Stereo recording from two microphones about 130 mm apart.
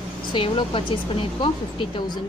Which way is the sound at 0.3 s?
40° left (ahead or behind).